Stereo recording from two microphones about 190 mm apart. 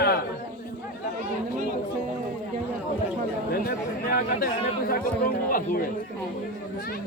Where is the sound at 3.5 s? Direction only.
50° left (ahead or behind).